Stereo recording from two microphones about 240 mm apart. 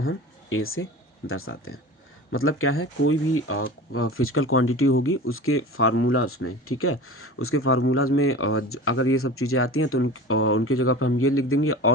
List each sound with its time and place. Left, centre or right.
0.0 s speech: left